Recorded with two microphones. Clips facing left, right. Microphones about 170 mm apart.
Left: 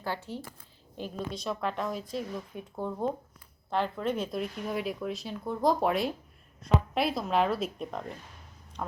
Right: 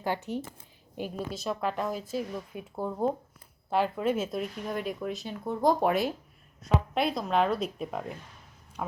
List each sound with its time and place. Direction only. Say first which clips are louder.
0.0 s speech: right 4 dB; 15° right (ahead or behind)
0.9 s a woman's voice: right 1 dB; 5° right (ahead or behind)